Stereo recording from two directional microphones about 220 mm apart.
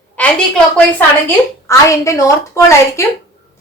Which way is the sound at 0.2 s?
5° left (ahead or behind).